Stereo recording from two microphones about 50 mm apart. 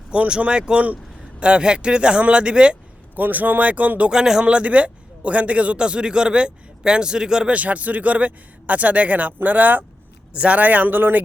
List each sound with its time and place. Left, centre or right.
0.1 s a man's voice: right
3.2 s speech: right
4.1 s a man's voice: centre
7.5 s a man's voice: right